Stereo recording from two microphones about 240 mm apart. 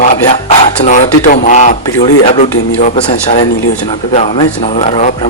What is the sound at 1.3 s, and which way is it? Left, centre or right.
Speech, left.